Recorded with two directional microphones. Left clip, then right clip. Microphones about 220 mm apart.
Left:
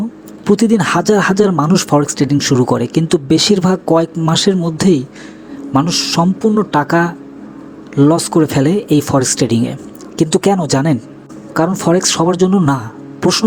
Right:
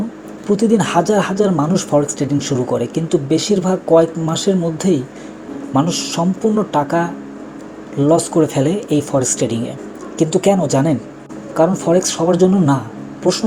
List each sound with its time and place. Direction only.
0.4 s speech: 50° left (ahead or behind)